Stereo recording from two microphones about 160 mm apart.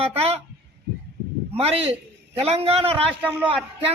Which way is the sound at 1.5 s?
40° right (ahead or behind).